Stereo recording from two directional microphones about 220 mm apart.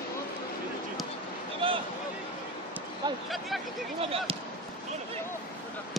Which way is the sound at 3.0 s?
20° right (ahead or behind).